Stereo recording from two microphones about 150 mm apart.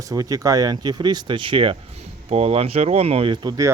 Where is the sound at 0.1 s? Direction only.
25° right (ahead or behind).